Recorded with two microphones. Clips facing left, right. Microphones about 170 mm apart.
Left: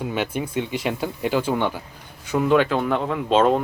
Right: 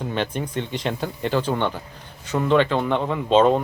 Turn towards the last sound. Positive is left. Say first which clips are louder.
# right 1 dB
turn(degrees=0)  # may be behind; listen again after turning